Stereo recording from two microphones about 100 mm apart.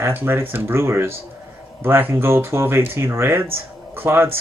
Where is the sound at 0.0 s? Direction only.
20° right (ahead or behind).